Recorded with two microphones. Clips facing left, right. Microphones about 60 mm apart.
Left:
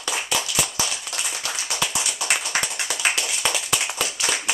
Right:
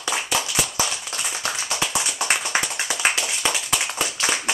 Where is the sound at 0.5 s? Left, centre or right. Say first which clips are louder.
Right 1 dB; right.